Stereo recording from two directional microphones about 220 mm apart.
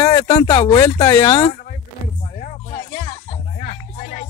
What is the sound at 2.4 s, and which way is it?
Music, 35° left (ahead or behind).